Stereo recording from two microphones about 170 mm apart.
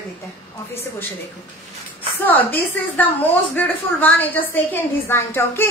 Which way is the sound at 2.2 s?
10° left (ahead or behind).